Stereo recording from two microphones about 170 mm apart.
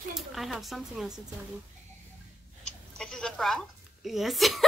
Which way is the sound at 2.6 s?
5° left (ahead or behind).